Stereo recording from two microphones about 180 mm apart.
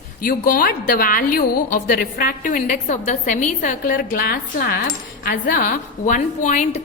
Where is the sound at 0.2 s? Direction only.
50° left (ahead or behind).